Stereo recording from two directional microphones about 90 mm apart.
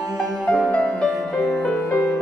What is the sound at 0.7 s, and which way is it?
Music, 15° left (ahead or behind).